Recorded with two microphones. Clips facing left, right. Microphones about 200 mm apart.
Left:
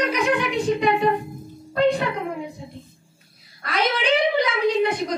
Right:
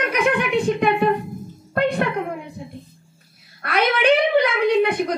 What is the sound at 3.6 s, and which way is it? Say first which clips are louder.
A woman's voice: right 4 dB; 60° right (ahead or behind).